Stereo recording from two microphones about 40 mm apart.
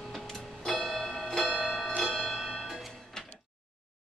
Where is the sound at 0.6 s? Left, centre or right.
Centre.